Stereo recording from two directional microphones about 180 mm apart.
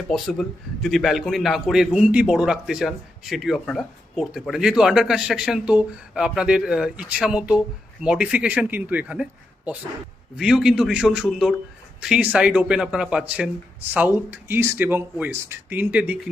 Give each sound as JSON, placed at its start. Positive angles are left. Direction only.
{"t": 0.1, "sound": "a man's voice", "side_deg": 0}
{"t": 10.3, "sound": "a man's voice", "side_deg": -5}